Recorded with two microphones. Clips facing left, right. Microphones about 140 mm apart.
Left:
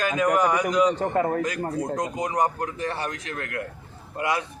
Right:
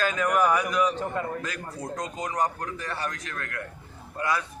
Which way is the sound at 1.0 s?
60° left (ahead or behind).